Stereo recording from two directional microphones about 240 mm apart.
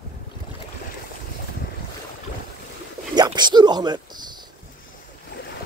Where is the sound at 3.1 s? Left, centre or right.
Centre.